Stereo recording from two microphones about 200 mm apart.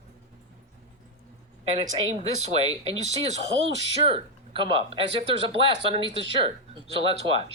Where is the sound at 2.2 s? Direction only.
30° right (ahead or behind).